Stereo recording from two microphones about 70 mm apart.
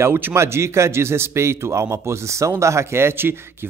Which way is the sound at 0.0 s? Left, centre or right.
Right.